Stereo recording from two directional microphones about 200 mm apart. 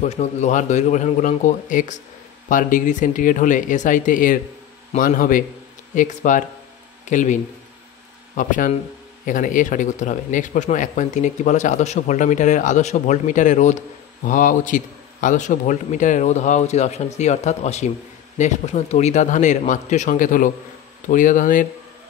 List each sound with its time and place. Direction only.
0.0 s speech: 35° left (ahead or behind)
8.4 s speech: 40° left (ahead or behind)